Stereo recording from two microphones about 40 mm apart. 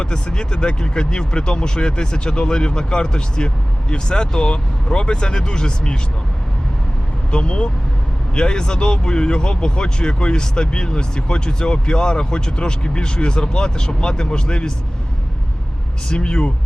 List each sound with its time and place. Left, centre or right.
0.0 s speech: left
7.3 s speech: left
16.0 s speech: left